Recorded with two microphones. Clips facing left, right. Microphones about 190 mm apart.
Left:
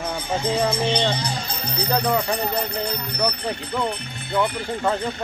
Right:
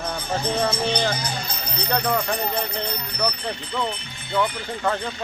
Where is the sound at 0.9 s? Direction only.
25° left (ahead or behind).